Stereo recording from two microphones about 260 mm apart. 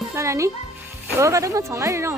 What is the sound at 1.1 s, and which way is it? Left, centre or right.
Speech, centre.